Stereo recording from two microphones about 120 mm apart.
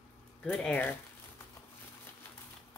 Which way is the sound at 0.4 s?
5° left (ahead or behind).